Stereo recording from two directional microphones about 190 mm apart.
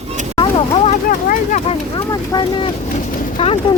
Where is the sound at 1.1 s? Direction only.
45° left (ahead or behind).